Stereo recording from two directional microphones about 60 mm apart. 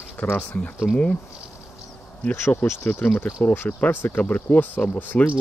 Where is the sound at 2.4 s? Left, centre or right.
Left.